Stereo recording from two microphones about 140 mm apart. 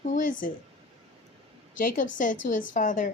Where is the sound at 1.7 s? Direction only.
70° left (ahead or behind).